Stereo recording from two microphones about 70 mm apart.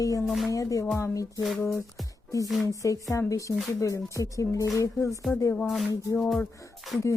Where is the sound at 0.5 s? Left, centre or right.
Left.